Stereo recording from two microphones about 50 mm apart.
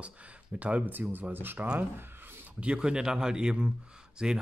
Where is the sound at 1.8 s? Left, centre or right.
Right.